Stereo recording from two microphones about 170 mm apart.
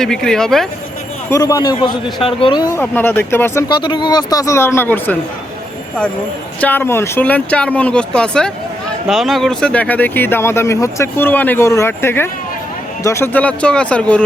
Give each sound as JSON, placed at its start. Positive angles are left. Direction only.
{"t": 0.0, "sound": "speech", "side_deg": 5}
{"t": 1.3, "sound": "a man's voice", "side_deg": 20}
{"t": 6.6, "sound": "speech", "side_deg": 10}